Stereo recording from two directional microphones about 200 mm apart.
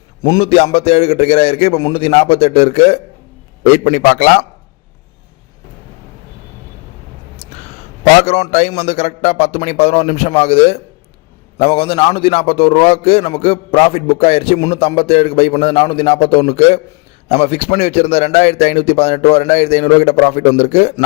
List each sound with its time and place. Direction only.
0.2 s a man's voice: 20° left (ahead or behind)
8.2 s a man's voice: 35° left (ahead or behind)